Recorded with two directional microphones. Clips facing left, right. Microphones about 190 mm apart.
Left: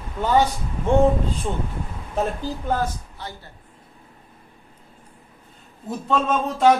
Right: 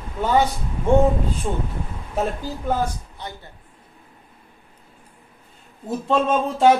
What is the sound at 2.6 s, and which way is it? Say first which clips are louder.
Speech: right 2 dB; 15° right (ahead or behind).